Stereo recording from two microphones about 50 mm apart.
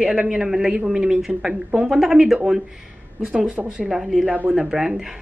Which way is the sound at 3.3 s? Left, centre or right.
Right.